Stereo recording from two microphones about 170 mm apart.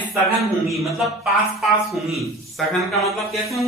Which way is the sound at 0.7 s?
Centre (ahead or behind).